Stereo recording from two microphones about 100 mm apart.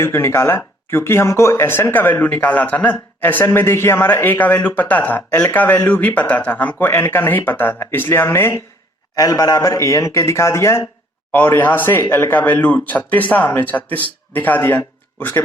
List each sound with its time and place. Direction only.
0.0 s speech: 25° left (ahead or behind)
9.1 s a man's voice: 35° left (ahead or behind); by 15.4 s 20° left (ahead or behind)